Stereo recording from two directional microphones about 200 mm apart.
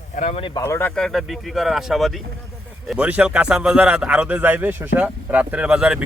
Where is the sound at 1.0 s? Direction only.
Centre (ahead or behind).